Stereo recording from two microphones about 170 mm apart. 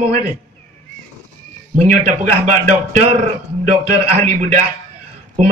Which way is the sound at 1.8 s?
45° right (ahead or behind).